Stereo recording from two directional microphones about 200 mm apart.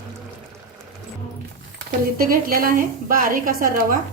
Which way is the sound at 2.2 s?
45° right (ahead or behind).